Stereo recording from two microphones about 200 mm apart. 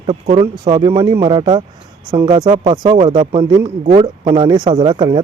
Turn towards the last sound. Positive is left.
turn(degrees=-25)  # may be behind; listen again after turning